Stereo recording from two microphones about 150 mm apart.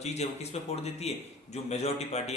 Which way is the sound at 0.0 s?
45° left (ahead or behind).